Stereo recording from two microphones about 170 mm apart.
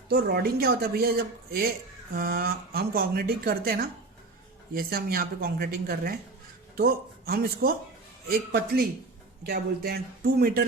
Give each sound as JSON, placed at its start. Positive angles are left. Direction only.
{"t": 0.1, "sound": "speech", "side_deg": -65}